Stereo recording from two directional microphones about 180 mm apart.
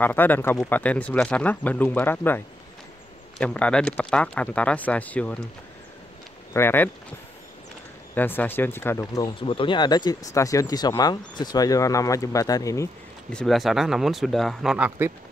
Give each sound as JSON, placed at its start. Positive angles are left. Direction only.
{"t": 0.0, "sound": "speech", "side_deg": 10}
{"t": 6.5, "sound": "speech", "side_deg": 10}
{"t": 8.1, "sound": "speech", "side_deg": 10}
{"t": 9.4, "sound": "speech", "side_deg": 25}
{"t": 13.3, "sound": "speech", "side_deg": 5}